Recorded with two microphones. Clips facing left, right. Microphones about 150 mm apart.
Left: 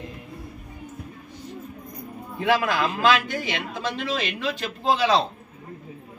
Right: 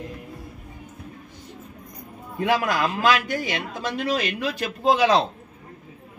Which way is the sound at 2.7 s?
45° right (ahead or behind).